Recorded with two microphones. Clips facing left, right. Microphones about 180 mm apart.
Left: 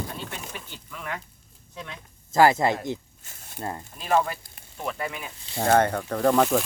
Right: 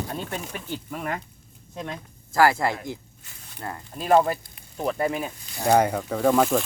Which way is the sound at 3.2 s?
45° left (ahead or behind).